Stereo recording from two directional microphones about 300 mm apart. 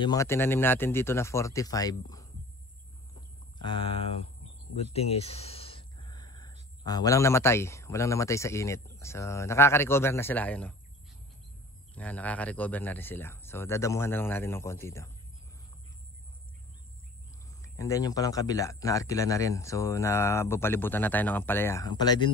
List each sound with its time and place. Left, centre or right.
0.0 s speech: centre
3.6 s speech: centre
4.9 s a sound: centre
6.8 s speech: centre
11.9 s speech: centre
17.6 s speech: centre